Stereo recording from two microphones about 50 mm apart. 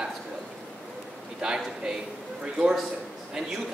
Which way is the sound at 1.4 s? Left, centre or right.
Centre.